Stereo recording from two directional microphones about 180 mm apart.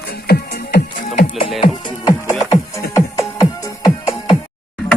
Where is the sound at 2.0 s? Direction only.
20° left (ahead or behind).